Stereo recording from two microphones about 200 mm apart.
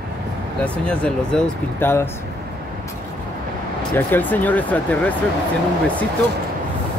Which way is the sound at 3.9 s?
10° left (ahead or behind).